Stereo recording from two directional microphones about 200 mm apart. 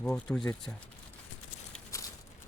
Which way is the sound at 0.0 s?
5° left (ahead or behind).